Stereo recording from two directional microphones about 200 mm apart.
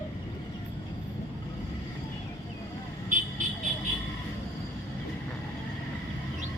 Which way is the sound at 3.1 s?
40° right (ahead or behind).